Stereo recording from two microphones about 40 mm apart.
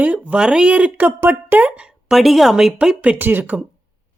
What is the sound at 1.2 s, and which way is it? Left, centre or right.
Speech, right.